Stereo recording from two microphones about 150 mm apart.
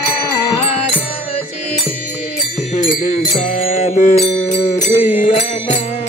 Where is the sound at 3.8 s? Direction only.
40° left (ahead or behind).